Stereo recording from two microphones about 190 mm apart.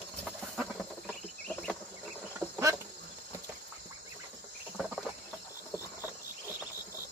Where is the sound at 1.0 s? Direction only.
5° left (ahead or behind).